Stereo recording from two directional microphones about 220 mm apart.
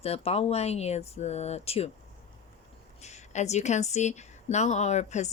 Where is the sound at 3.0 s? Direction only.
30° left (ahead or behind).